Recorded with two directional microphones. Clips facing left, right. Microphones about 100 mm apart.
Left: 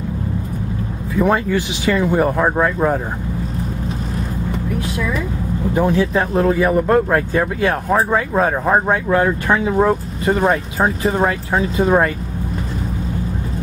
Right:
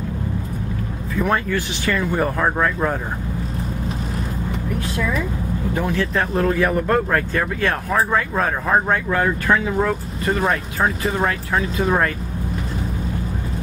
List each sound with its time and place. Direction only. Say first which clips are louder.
1.1 s speech: left 4 dB; 15° left (ahead or behind)
5.9 s speech: left 4 dB; 15° left (ahead or behind)